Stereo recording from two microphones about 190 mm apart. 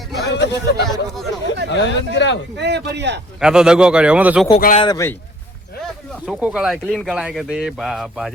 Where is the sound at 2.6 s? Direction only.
65° right (ahead or behind).